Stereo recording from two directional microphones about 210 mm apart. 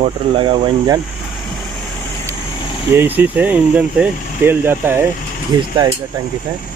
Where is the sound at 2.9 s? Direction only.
10° right (ahead or behind).